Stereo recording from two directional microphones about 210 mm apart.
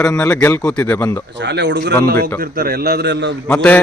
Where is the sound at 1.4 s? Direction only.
55° right (ahead or behind).